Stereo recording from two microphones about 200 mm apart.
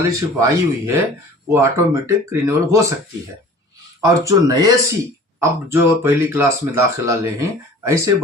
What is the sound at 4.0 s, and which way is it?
Speech, 15° right (ahead or behind).